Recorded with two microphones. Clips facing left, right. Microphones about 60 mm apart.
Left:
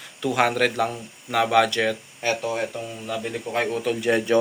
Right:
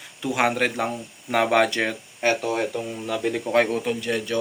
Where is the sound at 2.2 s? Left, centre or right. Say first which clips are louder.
Right 5 dB; right.